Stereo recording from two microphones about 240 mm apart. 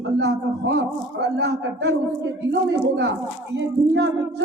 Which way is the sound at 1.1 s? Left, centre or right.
Right.